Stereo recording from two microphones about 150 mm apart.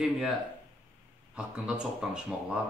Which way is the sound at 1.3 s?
5° right (ahead or behind).